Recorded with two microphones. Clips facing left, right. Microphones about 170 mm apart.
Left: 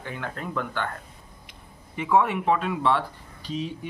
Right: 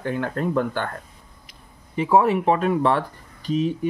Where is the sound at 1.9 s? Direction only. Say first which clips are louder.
Right 4 dB; 35° right (ahead or behind); by 3.9 s 50° right (ahead or behind).